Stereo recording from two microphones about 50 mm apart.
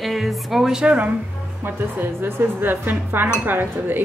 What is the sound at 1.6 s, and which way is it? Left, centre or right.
Speech, right.